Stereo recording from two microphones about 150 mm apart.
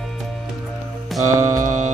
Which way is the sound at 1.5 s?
55° right (ahead or behind).